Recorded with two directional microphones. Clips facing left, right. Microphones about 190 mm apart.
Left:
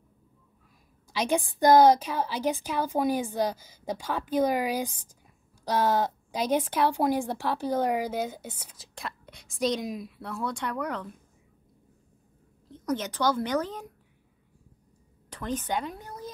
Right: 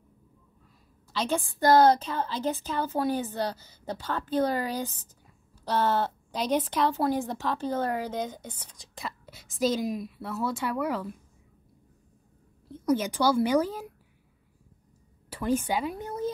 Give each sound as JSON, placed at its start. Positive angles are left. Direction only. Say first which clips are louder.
{"t": 1.1, "sound": "speech", "louder": "left 2 dB", "side_deg": 15}
{"t": 12.6, "sound": "a woman's voice", "louder": "right 4 dB", "side_deg": -10}
{"t": 15.2, "sound": "a woman's voice", "louder": "right 5 dB", "side_deg": -10}
{"t": 16.0, "sound": "a sound", "louder": "right 9 dB", "side_deg": -25}